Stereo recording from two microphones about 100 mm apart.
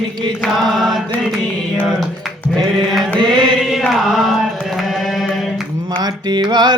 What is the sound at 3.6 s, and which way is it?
Music, centre (ahead or behind).